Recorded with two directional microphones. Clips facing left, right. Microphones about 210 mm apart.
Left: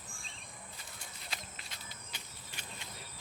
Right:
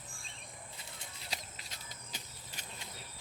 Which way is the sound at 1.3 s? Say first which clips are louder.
Right 2 dB; 35° right (ahead or behind).